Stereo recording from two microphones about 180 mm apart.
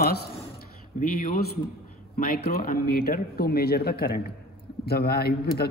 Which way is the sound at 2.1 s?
55° left (ahead or behind).